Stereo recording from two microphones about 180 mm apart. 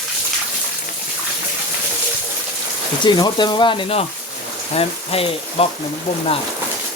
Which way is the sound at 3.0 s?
25° left (ahead or behind).